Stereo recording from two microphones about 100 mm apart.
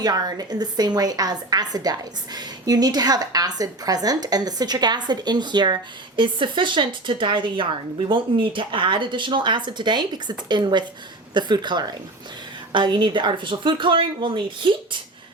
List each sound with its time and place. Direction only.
0.0 s a woman's voice: 45° right (ahead or behind)